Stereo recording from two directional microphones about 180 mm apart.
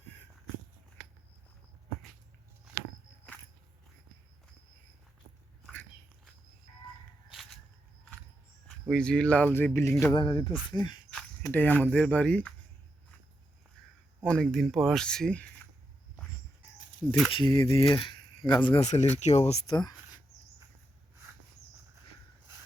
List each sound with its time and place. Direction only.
7.3 s a sound: centre (ahead or behind)
8.6 s speech: 5° left (ahead or behind)
10.2 s speech: 30° left (ahead or behind)
11.4 s speech: 10° left (ahead or behind)
14.3 s speech: 5° left (ahead or behind)
17.3 s speech: 25° left (ahead or behind)
19.7 s speech: 25° left (ahead or behind)